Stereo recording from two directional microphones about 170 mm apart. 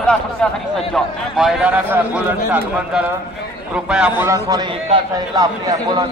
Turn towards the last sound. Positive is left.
turn(degrees=-25)  # may be behind; listen again after turning